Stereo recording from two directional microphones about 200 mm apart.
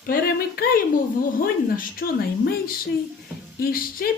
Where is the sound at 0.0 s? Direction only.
45° left (ahead or behind).